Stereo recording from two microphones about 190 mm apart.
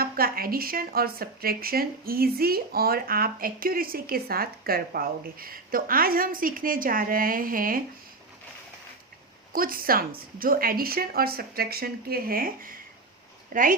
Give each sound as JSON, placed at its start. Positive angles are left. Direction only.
{"t": 0.0, "sound": "a woman's voice", "side_deg": -50}
{"t": 9.5, "sound": "a woman's voice", "side_deg": -50}